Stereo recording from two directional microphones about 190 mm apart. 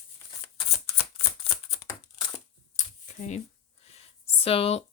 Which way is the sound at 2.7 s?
40° left (ahead or behind).